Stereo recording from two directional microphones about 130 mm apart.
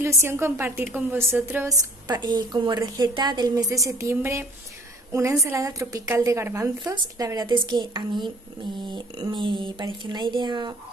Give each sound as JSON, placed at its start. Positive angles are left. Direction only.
{"t": 0.0, "sound": "a woman's voice", "side_deg": -20}
{"t": 2.0, "sound": "a woman's voice", "side_deg": -30}